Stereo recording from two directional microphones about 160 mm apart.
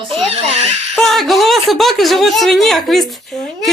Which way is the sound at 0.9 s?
Centre (ahead or behind).